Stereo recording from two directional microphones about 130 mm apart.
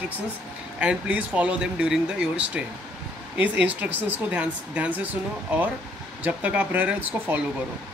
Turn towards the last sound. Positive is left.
turn(degrees=-10)  # may be behind; listen again after turning